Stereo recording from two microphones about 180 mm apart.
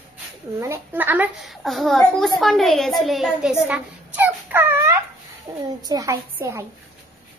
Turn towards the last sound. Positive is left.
turn(degrees=-15)  # may be behind; listen again after turning